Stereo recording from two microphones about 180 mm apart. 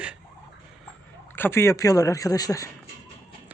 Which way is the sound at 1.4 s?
15° left (ahead or behind).